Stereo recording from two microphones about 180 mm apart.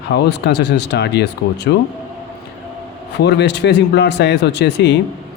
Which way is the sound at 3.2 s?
70° left (ahead or behind).